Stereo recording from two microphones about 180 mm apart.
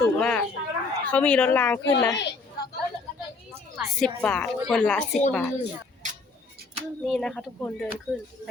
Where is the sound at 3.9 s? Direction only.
5° left (ahead or behind).